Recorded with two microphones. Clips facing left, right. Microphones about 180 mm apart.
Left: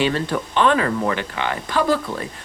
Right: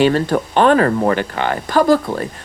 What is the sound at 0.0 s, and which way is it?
Speech, 45° right (ahead or behind).